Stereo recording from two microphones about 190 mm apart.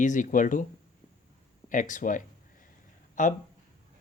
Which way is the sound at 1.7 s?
45° left (ahead or behind).